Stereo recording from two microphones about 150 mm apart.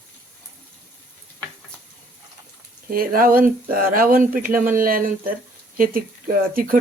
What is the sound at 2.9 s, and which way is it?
Speech, 70° right (ahead or behind).